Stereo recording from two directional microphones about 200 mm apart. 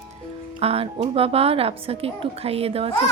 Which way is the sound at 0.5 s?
30° right (ahead or behind).